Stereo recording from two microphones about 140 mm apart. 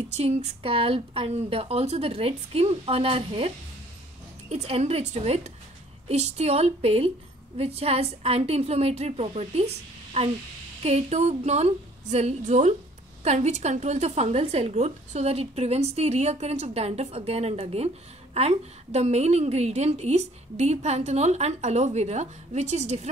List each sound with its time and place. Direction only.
0.1 s a woman's voice: 50° right (ahead or behind)